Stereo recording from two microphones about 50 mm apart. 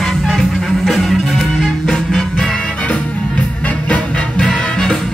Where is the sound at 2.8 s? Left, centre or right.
Left.